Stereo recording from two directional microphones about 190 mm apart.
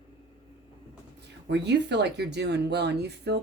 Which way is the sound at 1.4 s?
65° right (ahead or behind).